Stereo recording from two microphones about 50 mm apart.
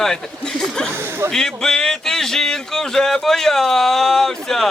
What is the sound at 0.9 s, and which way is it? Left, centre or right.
Speech, right.